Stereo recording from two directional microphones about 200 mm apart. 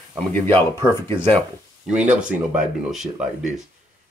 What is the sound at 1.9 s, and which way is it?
Speech, 5° right (ahead or behind).